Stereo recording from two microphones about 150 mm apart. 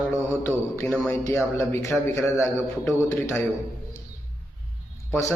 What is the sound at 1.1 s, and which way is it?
A man's voice, 20° left (ahead or behind).